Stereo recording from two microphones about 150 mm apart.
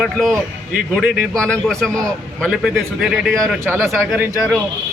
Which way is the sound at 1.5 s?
5° left (ahead or behind).